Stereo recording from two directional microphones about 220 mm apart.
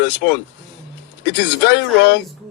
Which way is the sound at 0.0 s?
55° left (ahead or behind).